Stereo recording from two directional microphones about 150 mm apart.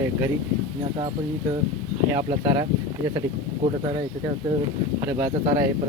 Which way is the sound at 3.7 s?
30° right (ahead or behind).